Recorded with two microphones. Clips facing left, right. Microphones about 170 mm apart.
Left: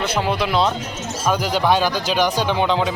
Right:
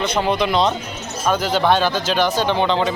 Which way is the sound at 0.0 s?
5° left (ahead or behind).